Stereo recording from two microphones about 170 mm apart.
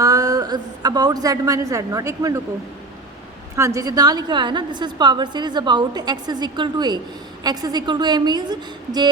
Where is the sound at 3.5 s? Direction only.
20° right (ahead or behind).